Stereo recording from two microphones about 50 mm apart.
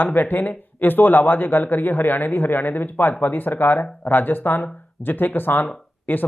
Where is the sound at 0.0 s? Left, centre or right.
Left.